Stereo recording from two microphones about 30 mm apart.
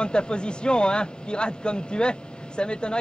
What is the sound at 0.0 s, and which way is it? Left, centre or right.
A man's voice, left.